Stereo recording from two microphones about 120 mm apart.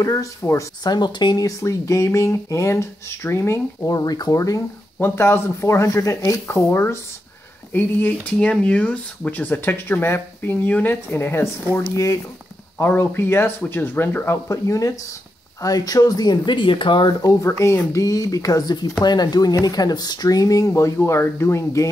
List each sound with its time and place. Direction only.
0.0 s speech: 25° left (ahead or behind)
0.8 s speech: 35° left (ahead or behind)
4.9 s speech: 20° left (ahead or behind); by 17.3 s 40° left (ahead or behind)
17.4 s speech: 25° left (ahead or behind)